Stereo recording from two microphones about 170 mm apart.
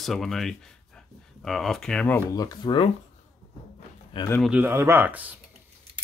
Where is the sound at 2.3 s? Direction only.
25° left (ahead or behind).